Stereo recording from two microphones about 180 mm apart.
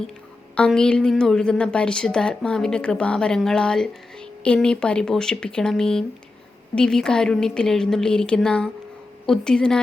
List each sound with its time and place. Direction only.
0.5 s a woman's voice: 5° left (ahead or behind)